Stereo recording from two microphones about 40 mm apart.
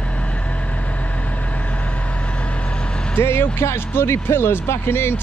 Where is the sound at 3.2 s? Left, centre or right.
Left.